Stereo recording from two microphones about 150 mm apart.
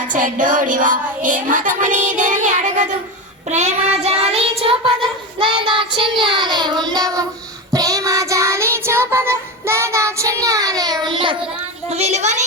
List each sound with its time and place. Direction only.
0.1 s child singing: 60° right (ahead or behind); by 11.3 s 35° right (ahead or behind)
11.9 s speech: 45° right (ahead or behind)